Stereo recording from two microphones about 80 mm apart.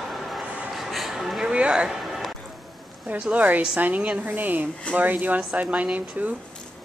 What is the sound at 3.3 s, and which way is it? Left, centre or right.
Speech, centre.